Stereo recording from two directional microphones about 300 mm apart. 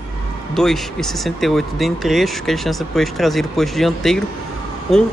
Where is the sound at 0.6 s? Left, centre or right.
Centre.